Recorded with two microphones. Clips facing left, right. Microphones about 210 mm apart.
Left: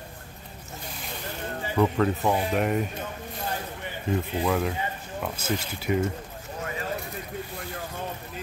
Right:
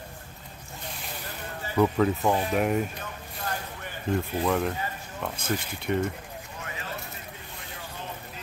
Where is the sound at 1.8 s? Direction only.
Centre (ahead or behind).